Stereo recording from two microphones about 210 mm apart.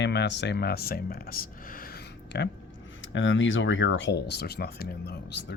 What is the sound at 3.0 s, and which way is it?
Speech, 60° left (ahead or behind).